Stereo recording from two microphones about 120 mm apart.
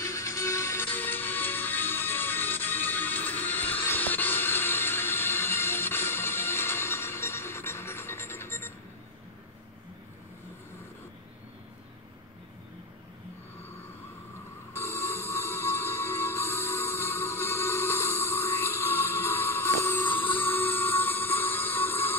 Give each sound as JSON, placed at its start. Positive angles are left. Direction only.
{"t": 0.0, "sound": "music", "side_deg": 25}
{"t": 14.7, "sound": "music", "side_deg": 20}